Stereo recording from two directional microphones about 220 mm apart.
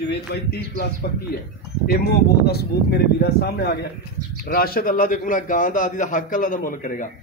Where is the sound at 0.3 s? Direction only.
45° left (ahead or behind).